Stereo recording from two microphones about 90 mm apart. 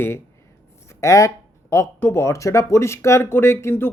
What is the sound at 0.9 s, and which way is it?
Speech, 35° left (ahead or behind).